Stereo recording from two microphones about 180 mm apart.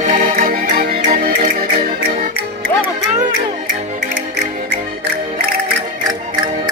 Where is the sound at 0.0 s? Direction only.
45° right (ahead or behind).